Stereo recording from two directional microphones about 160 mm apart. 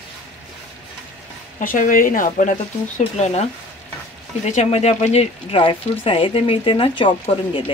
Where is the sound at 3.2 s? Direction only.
45° left (ahead or behind).